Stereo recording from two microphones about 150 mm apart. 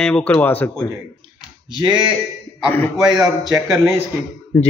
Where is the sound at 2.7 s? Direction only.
10° left (ahead or behind).